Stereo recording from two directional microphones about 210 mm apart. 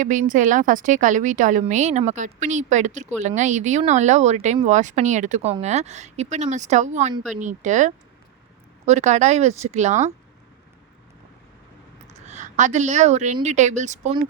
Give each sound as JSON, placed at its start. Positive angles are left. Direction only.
{"t": 0.0, "sound": "a woman's voice", "side_deg": -35}
{"t": 12.1, "sound": "a woman's voice", "side_deg": -35}